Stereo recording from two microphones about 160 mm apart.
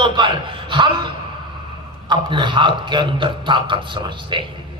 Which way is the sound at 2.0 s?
30° right (ahead or behind).